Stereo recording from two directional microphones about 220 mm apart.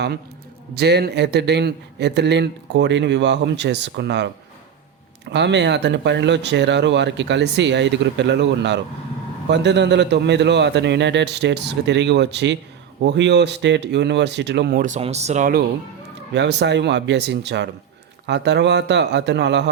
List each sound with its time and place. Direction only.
0.7 s a man's voice: 50° right (ahead or behind)
5.3 s a man's voice: 50° right (ahead or behind); by 15.6 s 35° right (ahead or behind)
16.3 s a man's voice: 50° right (ahead or behind)